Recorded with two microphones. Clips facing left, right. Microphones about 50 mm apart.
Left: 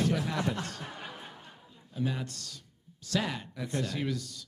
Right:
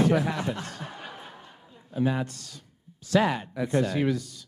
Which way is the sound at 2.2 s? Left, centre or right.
Centre.